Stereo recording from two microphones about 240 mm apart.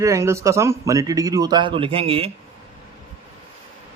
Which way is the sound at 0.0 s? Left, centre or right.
Centre.